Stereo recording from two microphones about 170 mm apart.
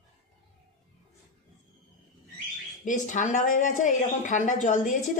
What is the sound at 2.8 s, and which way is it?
Speech, 50° left (ahead or behind).